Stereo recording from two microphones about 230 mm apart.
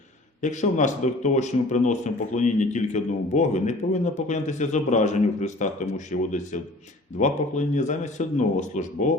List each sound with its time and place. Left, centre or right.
0.4 s a man's voice: left